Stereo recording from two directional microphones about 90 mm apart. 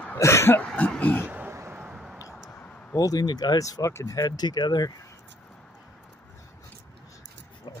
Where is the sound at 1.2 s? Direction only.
20° right (ahead or behind).